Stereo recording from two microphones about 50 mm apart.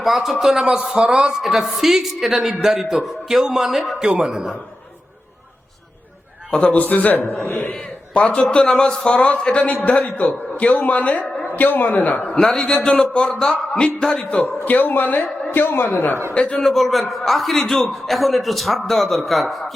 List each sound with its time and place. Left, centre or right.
0.0 s a man's voice: centre
0.9 s speech: centre
1.5 s a man's voice: centre
6.5 s a man's voice: centre
6.7 s a man's voice: left
7.7 s a man's voice: left
14.3 s a man's voice: left
16.3 s a man's voice: left
16.6 s a man's voice: centre